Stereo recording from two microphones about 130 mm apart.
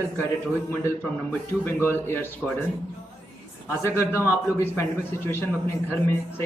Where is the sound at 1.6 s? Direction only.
15° left (ahead or behind).